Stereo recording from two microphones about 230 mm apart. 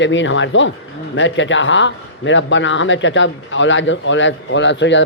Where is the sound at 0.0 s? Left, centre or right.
Left.